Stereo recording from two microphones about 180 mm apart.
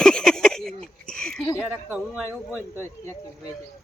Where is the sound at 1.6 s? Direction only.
10° right (ahead or behind).